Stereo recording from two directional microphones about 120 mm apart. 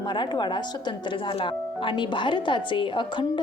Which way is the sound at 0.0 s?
40° left (ahead or behind).